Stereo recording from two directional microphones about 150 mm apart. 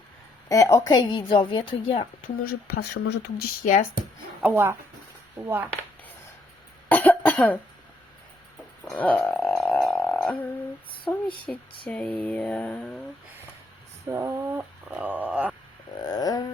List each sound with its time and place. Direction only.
0.4 s a woman's voice: 20° left (ahead or behind); by 2.0 s 35° left (ahead or behind)
2.2 s speech: 90° left
4.4 s speech: 15° right (ahead or behind)
6.8 s cough: 10° left (ahead or behind)
8.9 s a sound: 5° left (ahead or behind)
11.5 s mantra: 5° left (ahead or behind)
14.1 s speech: 20° right (ahead or behind)
16.0 s a sound: 25° left (ahead or behind)